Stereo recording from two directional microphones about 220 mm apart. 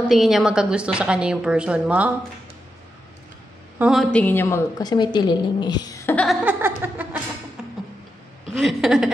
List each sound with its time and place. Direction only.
0.1 s a woman's voice: centre (ahead or behind)
3.7 s a woman's voice: 5° right (ahead or behind)
6.2 s music: 10° right (ahead or behind)
8.5 s a woman's voice: centre (ahead or behind)